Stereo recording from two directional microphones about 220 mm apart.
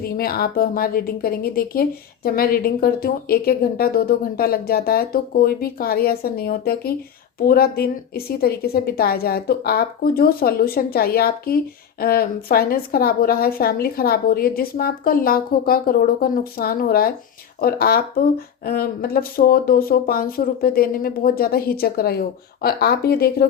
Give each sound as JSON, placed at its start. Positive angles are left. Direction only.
{"t": 0.0, "sound": "a woman's voice", "side_deg": 45}